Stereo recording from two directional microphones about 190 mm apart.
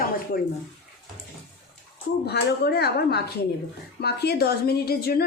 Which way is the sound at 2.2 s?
60° left (ahead or behind).